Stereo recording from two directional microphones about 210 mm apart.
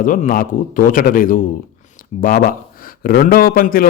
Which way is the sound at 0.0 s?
40° left (ahead or behind).